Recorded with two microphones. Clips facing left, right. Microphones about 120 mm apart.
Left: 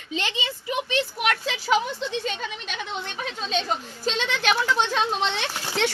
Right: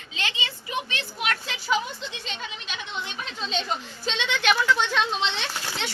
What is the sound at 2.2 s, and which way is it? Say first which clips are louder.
A woman's voice: left 6 dB; 50° left (ahead or behind).